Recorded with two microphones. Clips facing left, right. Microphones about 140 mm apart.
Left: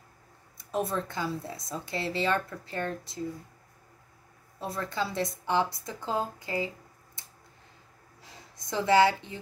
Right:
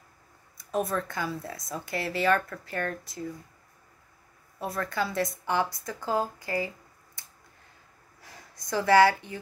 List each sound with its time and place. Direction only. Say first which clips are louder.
0.6 s speech: right 1 dB; 25° left (ahead or behind)
4.6 s speech: right 2 dB; 25° left (ahead or behind)
8.2 s speech: right 1 dB; 20° left (ahead or behind)